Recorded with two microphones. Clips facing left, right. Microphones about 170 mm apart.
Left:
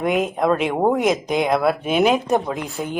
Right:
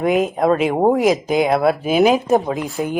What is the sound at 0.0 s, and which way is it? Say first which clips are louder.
Speech: right 3 dB; centre (ahead or behind).